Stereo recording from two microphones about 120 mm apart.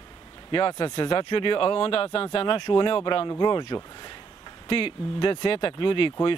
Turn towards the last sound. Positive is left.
turn(degrees=45)  # may be behind; listen again after turning